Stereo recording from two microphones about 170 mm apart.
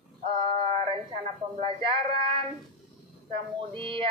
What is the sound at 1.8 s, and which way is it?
Speech, 30° right (ahead or behind).